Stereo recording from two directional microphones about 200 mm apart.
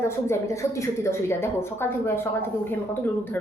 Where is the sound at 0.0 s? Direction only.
15° left (ahead or behind).